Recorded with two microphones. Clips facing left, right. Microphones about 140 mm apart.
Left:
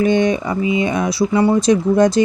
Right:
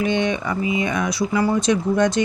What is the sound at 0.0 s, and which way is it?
Speech, 40° left (ahead or behind).